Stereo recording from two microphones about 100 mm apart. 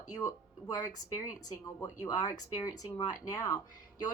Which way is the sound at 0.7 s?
40° left (ahead or behind).